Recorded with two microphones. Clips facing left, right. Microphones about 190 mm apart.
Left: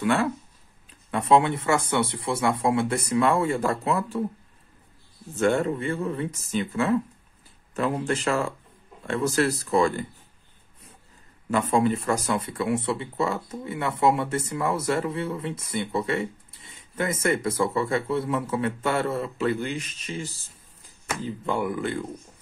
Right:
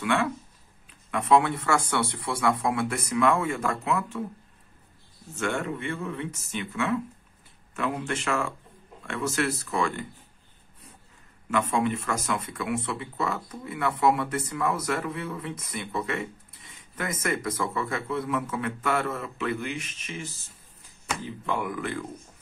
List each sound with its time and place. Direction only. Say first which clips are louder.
0.0 s speech: left 3 dB; 35° left (ahead or behind)
5.3 s speech: left 7 dB; 35° left (ahead or behind)
11.5 s speech: left 3 dB; 35° left (ahead or behind)